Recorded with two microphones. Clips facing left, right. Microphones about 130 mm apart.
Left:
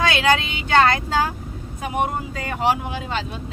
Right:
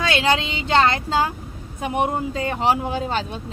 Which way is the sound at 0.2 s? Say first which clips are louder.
Left 1 dB; 25° right (ahead or behind).